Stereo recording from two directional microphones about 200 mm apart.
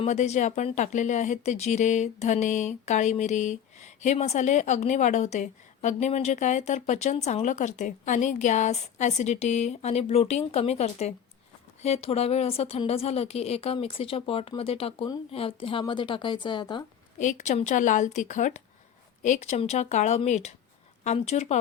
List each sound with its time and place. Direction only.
0.0 s speech: 35° left (ahead or behind)
17.2 s speech: 35° left (ahead or behind)